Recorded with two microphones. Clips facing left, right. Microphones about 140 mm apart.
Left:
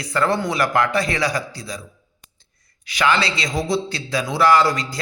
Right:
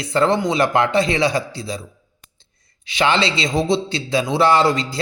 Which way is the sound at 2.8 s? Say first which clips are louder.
Right 2 dB; 25° right (ahead or behind).